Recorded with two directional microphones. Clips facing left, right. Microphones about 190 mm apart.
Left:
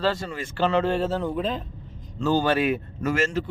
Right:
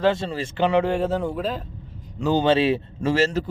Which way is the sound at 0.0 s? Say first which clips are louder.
Right 4 dB; 25° right (ahead or behind).